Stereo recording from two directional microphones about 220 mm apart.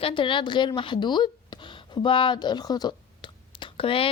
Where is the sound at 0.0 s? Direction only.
20° left (ahead or behind).